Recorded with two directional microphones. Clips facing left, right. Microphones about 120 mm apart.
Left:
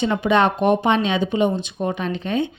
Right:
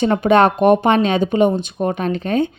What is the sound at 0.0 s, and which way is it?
A woman's voice, 50° right (ahead or behind).